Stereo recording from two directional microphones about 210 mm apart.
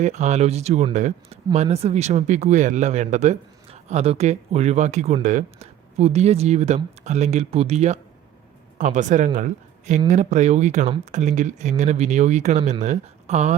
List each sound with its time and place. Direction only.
0.0 s speech: 35° right (ahead or behind)